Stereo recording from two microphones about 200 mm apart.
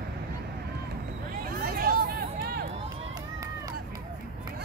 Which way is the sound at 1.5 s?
50° right (ahead or behind).